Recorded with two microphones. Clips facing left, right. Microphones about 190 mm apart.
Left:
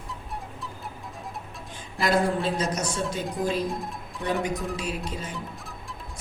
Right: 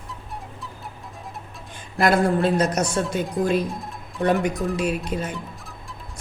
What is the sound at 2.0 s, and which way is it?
A woman's voice, 60° right (ahead or behind).